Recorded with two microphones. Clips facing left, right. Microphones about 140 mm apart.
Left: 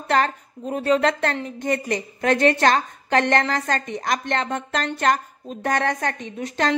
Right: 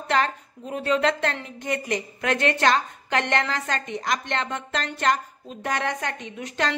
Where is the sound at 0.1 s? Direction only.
40° left (ahead or behind).